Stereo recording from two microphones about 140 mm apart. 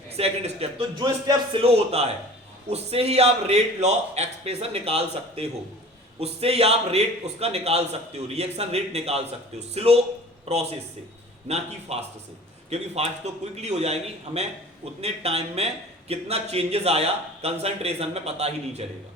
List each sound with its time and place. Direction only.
0.1 s speech: 45° right (ahead or behind)
0.8 s speech: 25° right (ahead or behind)
1.5 s a man's voice: 45° right (ahead or behind)